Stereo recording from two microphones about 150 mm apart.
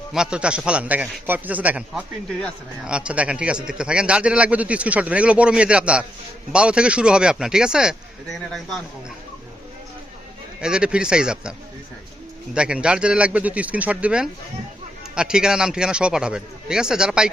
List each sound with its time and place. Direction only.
0.1 s a man's voice: 5° right (ahead or behind)
10.6 s speech: 5° right (ahead or behind)
12.5 s a man's voice: 5° right (ahead or behind)